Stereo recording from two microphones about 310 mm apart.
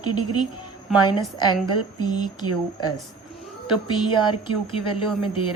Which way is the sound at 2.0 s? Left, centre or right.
Centre.